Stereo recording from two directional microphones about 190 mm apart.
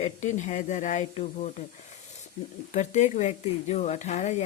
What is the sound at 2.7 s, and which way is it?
Speech, 40° left (ahead or behind).